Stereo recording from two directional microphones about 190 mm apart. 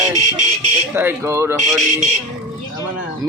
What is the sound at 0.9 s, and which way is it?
Speech, 15° right (ahead or behind).